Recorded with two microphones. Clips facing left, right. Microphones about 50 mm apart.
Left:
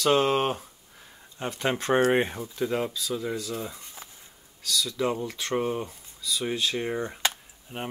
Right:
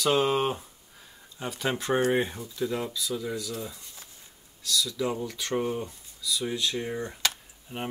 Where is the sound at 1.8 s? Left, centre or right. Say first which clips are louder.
Left 3 dB; left.